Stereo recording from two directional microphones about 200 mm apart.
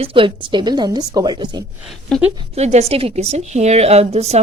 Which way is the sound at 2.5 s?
35° right (ahead or behind).